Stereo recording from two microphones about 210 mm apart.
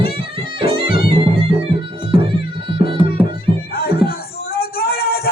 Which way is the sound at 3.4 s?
45° left (ahead or behind).